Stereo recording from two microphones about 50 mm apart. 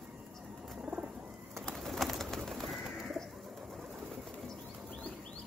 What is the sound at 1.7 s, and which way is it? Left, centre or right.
Bird, centre.